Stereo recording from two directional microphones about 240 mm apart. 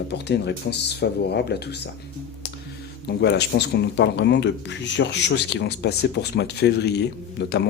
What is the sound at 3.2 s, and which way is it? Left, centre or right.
Speech, left.